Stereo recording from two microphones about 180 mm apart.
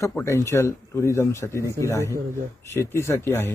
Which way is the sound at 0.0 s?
15° left (ahead or behind).